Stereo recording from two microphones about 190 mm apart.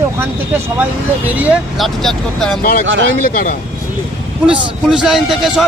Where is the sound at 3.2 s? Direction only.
50° left (ahead or behind).